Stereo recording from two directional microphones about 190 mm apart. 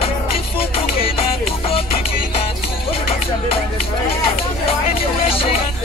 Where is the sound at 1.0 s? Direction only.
30° left (ahead or behind).